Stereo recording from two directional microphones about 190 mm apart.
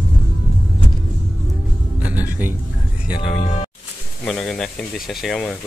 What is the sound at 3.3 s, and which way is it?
Speech, 35° left (ahead or behind).